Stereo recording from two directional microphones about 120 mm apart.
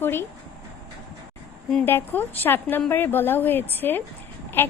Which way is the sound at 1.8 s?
15° left (ahead or behind).